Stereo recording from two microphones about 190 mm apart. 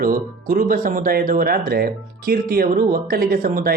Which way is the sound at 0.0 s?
50° right (ahead or behind).